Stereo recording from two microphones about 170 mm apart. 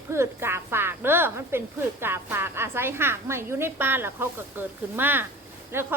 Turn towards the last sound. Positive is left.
turn(degrees=-15)  # may be behind; listen again after turning